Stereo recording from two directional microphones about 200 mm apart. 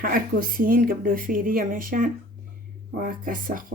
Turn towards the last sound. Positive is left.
turn(degrees=-45)  # may be behind; listen again after turning